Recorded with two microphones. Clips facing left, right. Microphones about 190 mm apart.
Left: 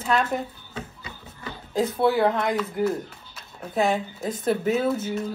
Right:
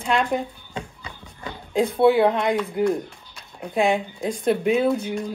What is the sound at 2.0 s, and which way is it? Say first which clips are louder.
Speech: right 5 dB; 25° right (ahead or behind).